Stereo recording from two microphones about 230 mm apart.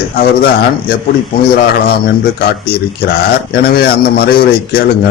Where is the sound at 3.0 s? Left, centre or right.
Left.